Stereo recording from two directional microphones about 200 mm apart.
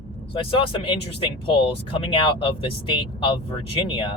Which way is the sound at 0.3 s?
25° left (ahead or behind).